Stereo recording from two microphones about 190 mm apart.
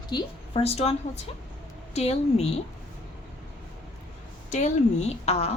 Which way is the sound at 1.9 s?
35° left (ahead or behind).